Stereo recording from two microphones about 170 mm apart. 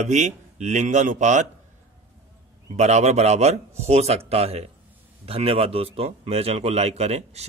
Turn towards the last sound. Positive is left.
turn(degrees=-40)  # may be behind; listen again after turning